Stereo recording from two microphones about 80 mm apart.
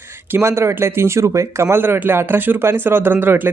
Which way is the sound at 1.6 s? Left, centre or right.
Right.